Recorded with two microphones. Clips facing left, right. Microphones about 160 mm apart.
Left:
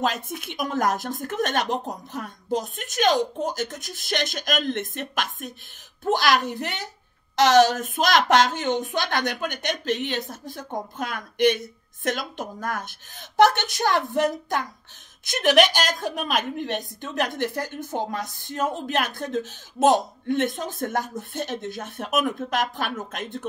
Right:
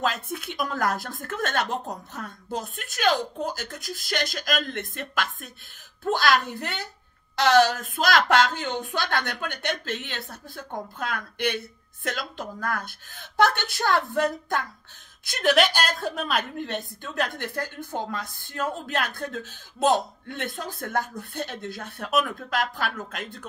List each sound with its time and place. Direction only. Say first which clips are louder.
0.0 s a woman's voice: left 2 dB; 20° left (ahead or behind)